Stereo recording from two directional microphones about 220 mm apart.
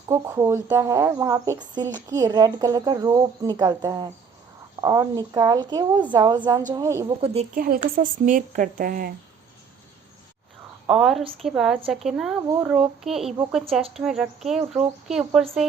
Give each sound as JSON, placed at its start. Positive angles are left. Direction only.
{"t": 0.1, "sound": "speech", "side_deg": -15}
{"t": 7.5, "sound": "speech", "side_deg": -40}
{"t": 10.8, "sound": "speech", "side_deg": 0}